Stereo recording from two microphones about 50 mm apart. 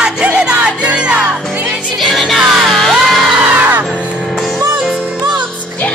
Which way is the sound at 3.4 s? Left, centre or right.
Right.